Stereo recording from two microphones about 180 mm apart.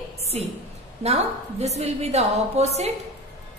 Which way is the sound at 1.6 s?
35° right (ahead or behind).